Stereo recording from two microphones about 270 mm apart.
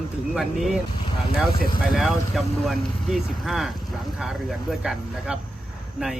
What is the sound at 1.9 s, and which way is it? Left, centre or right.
Speech, centre.